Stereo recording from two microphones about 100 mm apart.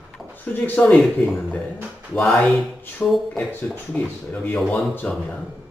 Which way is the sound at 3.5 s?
15° left (ahead or behind).